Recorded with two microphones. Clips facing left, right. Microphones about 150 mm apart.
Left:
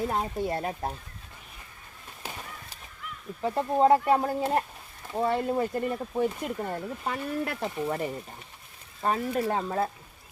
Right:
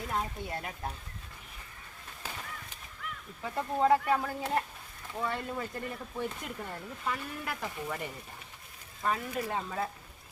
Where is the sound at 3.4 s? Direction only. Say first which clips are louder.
Left 6 dB; 30° left (ahead or behind).